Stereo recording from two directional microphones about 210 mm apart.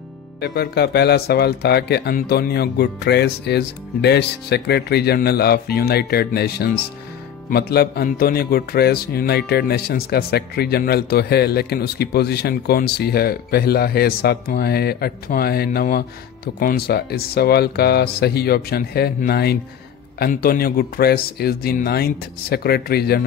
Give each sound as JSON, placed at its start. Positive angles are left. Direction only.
{"t": 0.4, "sound": "a man's voice", "side_deg": 50}